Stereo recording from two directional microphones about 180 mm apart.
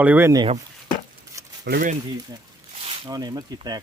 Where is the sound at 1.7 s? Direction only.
50° right (ahead or behind).